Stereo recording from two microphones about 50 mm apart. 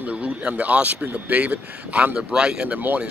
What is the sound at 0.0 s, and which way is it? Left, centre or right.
Speech, right.